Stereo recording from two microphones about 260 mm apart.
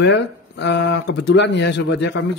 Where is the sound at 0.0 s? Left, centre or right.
Left.